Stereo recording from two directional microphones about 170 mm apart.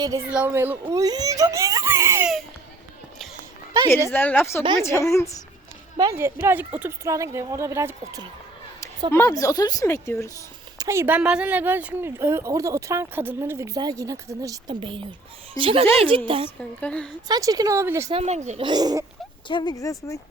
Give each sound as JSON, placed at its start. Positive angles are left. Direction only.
{"t": 0.3, "sound": "speech", "side_deg": -10}
{"t": 4.1, "sound": "a woman's voice", "side_deg": 10}
{"t": 6.0, "sound": "speech", "side_deg": -15}
{"t": 9.1, "sound": "speech", "side_deg": 15}
{"t": 10.8, "sound": "speech", "side_deg": -15}
{"t": 14.8, "sound": "speech", "side_deg": -30}
{"t": 16.6, "sound": "a woman's voice", "side_deg": 5}
{"t": 17.2, "sound": "speech", "side_deg": -20}
{"t": 18.1, "sound": "speech", "side_deg": -40}
{"t": 18.6, "sound": "speech", "side_deg": -25}
{"t": 19.5, "sound": "speech", "side_deg": 25}